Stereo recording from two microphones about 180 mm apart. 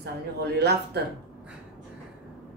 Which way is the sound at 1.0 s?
65° right (ahead or behind).